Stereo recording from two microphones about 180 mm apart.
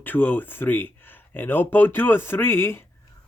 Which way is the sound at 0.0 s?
10° left (ahead or behind).